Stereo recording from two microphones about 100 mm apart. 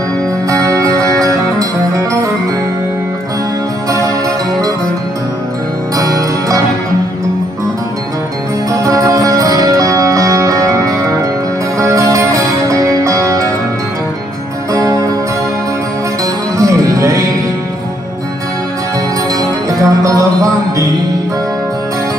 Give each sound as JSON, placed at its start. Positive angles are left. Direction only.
{"t": 0.5, "sound": "music", "side_deg": -35}
{"t": 5.9, "sound": "music", "side_deg": -35}
{"t": 8.7, "sound": "music", "side_deg": -35}
{"t": 14.7, "sound": "music", "side_deg": -35}
{"t": 16.5, "sound": "music", "side_deg": -35}
{"t": 19.4, "sound": "music", "side_deg": -35}